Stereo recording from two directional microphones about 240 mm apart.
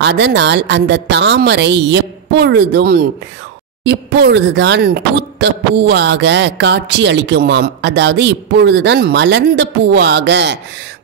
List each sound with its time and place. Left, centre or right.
0.0 s speech: right